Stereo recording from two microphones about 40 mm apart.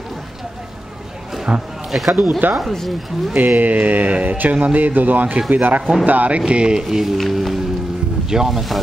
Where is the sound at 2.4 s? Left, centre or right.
Right.